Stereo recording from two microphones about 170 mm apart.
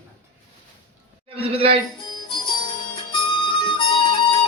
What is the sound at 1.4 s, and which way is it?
Speech, 35° right (ahead or behind).